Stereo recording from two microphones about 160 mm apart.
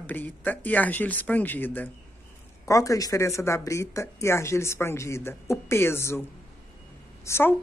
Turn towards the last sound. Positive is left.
turn(degrees=15)  # may be behind; listen again after turning